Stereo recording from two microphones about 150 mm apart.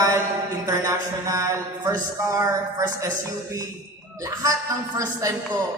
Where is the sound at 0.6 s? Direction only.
20° right (ahead or behind).